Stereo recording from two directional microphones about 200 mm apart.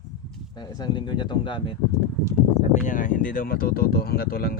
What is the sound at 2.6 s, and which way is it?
Speech, 40° left (ahead or behind).